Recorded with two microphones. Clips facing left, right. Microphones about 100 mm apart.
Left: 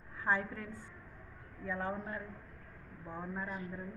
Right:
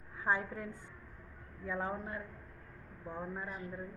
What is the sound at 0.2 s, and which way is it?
Speech, 15° right (ahead or behind).